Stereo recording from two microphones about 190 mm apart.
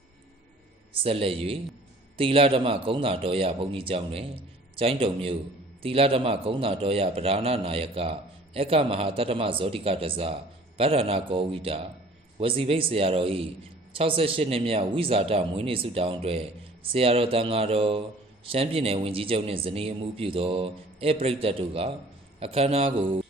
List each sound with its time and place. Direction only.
1.0 s a man's voice: 30° right (ahead or behind)